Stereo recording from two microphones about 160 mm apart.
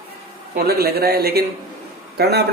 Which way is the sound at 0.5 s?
75° right (ahead or behind).